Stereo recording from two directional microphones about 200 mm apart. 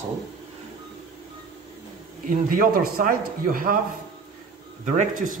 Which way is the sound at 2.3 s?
45° right (ahead or behind).